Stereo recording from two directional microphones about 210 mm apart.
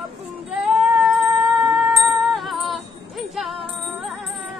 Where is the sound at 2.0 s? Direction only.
Centre (ahead or behind).